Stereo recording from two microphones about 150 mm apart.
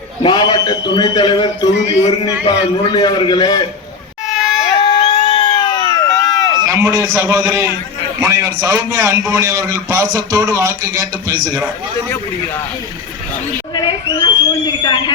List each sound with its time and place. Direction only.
0.2 s a man's voice: 30° left (ahead or behind)
1.9 s speech: 45° left (ahead or behind)
2.2 s a man's voice: 25° left (ahead or behind)
4.8 s a sound: 30° left (ahead or behind)
6.1 s run: centre (ahead or behind)
6.5 s a sound: 30° right (ahead or behind)
6.7 s a man's voice: 20° right (ahead or behind)
13.7 s a man's voice: 30° left (ahead or behind)